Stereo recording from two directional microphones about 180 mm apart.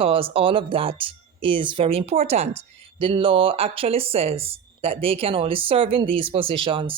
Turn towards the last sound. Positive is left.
turn(degrees=-30)  # may be behind; listen again after turning